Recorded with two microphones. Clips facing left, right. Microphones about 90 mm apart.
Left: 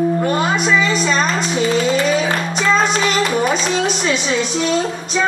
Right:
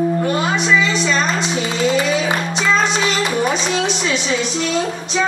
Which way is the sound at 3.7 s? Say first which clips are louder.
Left 1 dB; 45° left (ahead or behind).